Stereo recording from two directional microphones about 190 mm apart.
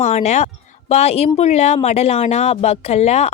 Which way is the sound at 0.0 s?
35° left (ahead or behind).